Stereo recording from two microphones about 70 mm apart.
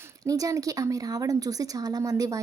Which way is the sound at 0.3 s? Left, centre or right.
Right.